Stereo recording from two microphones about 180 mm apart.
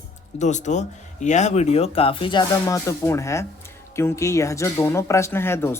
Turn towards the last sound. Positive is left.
turn(degrees=15)  # may be behind; listen again after turning